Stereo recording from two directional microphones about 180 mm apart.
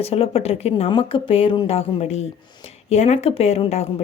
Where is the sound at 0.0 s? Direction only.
35° left (ahead or behind).